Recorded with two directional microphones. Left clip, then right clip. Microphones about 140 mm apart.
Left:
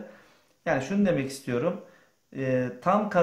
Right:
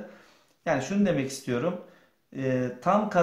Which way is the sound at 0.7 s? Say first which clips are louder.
Left 1 dB; 25° left (ahead or behind).